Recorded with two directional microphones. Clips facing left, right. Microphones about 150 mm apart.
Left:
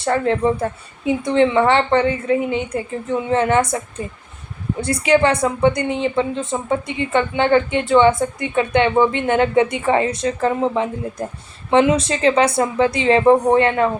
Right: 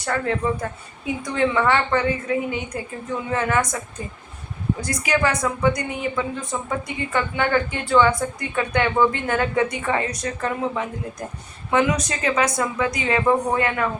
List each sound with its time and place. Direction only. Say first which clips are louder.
0.0 s a woman's voice: left 6 dB; 30° left (ahead or behind)
4.8 s a woman's voice: left 8 dB; 30° left (ahead or behind)